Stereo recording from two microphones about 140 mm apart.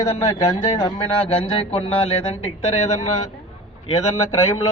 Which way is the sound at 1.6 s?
45° left (ahead or behind).